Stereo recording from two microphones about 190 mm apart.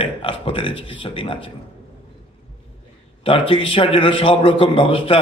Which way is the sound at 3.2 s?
30° left (ahead or behind).